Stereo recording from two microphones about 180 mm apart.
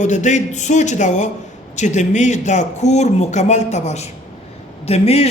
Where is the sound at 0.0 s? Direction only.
40° left (ahead or behind).